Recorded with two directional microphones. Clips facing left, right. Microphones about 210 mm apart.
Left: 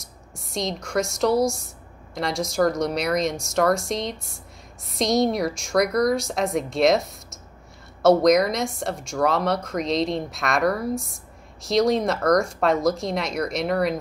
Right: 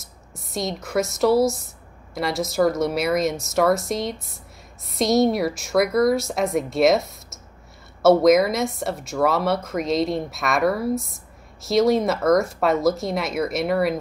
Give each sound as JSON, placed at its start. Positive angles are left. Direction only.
{"t": 0.0, "sound": "a woman's voice", "side_deg": 0}